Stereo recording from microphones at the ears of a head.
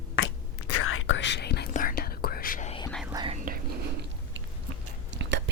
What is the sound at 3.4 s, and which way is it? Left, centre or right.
Chewing, right.